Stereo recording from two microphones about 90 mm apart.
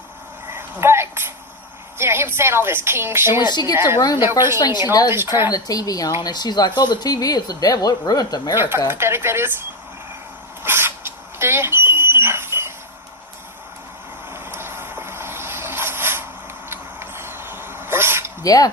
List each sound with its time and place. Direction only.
0.5 s a sound: 30° right (ahead or behind)
2.0 s a woman's voice: 25° right (ahead or behind)
3.4 s speech: 50° left (ahead or behind)
3.8 s a woman's voice: 25° right (ahead or behind)
4.9 s speech: 45° left (ahead or behind)
5.1 s a woman's voice: 25° right (ahead or behind)
5.5 s speech: 45° left (ahead or behind)
8.5 s a woman's voice: 25° right (ahead or behind)
10.6 s a sound: 25° right (ahead or behind)
14.3 s vehicle: 25° right (ahead or behind)
16.6 s a sound: 25° right (ahead or behind)
18.4 s speech: 40° left (ahead or behind)